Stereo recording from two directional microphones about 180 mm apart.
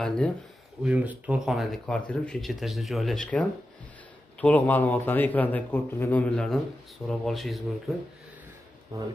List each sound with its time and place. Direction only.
0.0 s speech: 5° left (ahead or behind)
0.8 s a man's voice: 5° right (ahead or behind)
8.9 s speech: 20° right (ahead or behind)